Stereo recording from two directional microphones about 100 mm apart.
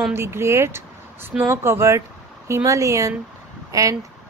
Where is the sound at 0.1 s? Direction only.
25° right (ahead or behind).